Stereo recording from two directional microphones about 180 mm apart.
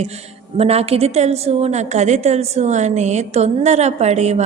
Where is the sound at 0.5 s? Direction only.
35° right (ahead or behind).